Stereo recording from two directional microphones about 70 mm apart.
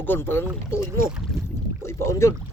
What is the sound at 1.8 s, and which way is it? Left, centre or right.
Speech, left.